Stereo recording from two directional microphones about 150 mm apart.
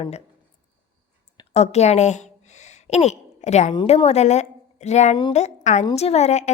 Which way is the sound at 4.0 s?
45° left (ahead or behind).